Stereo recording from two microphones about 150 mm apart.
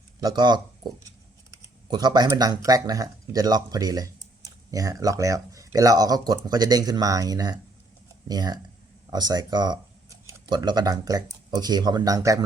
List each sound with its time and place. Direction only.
0.2 s speech: 25° right (ahead or behind)